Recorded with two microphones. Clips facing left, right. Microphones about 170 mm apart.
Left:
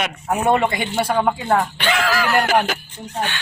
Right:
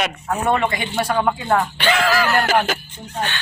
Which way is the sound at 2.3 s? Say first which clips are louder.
Left 1 dB; 10° left (ahead or behind).